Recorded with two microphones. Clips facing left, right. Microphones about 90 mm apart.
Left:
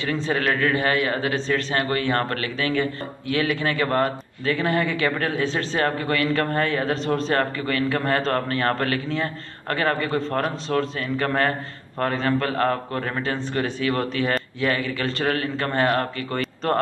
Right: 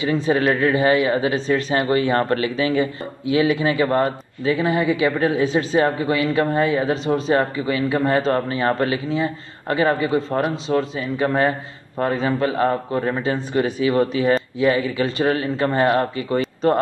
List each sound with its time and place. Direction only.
0.0 s speech: 15° right (ahead or behind)